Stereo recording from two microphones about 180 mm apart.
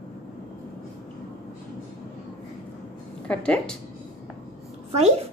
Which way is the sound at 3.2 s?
5° left (ahead or behind).